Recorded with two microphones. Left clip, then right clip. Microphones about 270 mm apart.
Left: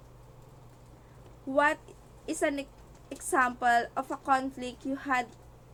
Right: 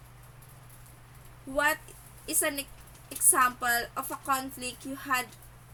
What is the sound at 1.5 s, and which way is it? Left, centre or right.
A woman's voice, right.